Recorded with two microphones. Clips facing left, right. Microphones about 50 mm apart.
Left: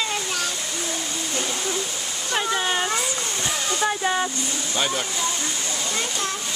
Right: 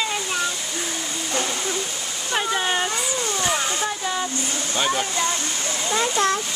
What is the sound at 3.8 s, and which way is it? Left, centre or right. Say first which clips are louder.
Speech: left 3 dB; left.